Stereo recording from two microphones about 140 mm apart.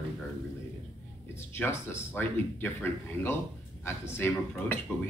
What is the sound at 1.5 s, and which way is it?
Speech, 15° left (ahead or behind).